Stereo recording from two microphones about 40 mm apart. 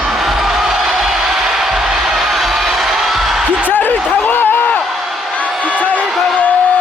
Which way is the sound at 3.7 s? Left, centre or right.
Left.